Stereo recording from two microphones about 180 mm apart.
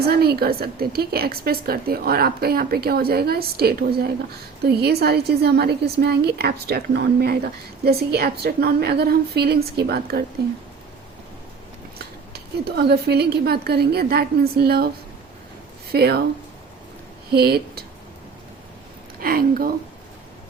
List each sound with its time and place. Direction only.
0.1 s speech: 60° right (ahead or behind)
11.9 s speech: 60° right (ahead or behind)
15.9 s speech: 65° right (ahead or behind)
17.3 s speech: 60° right (ahead or behind)
19.2 s speech: 55° right (ahead or behind)